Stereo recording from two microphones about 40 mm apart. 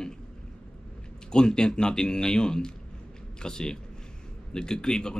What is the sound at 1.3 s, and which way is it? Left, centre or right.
A man's voice, centre.